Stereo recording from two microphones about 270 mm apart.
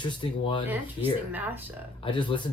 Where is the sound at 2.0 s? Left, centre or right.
Centre.